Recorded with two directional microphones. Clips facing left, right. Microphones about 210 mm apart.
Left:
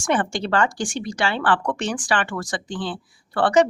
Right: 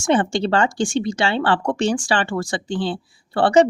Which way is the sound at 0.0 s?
25° right (ahead or behind).